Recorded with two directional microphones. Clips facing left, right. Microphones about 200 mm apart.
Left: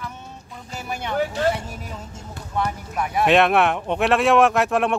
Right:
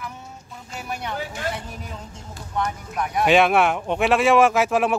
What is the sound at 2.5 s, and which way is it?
Speech, 5° left (ahead or behind).